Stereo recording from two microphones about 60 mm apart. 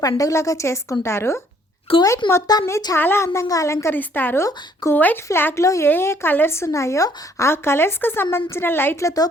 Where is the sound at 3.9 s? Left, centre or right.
Left.